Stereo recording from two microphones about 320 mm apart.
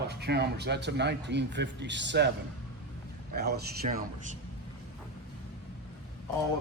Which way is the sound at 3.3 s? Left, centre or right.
Right.